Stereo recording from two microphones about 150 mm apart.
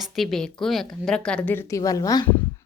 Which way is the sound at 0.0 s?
Centre (ahead or behind).